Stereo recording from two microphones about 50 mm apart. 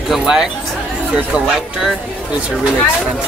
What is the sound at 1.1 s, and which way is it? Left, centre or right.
Speech, centre.